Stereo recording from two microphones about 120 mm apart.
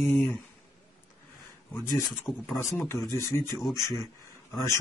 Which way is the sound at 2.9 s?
25° left (ahead or behind).